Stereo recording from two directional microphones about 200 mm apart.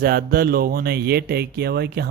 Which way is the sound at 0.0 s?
50° right (ahead or behind).